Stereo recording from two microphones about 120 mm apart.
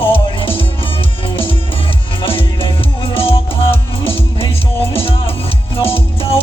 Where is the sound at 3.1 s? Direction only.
50° left (ahead or behind).